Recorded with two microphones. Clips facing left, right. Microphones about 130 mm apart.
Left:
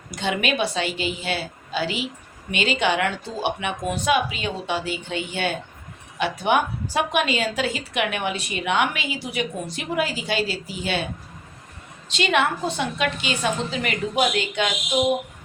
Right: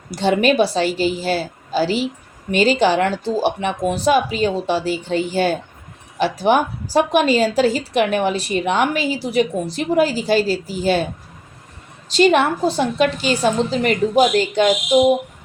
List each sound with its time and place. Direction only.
0.1 s a woman's voice: 35° right (ahead or behind)
12.1 s a woman's voice: 40° right (ahead or behind)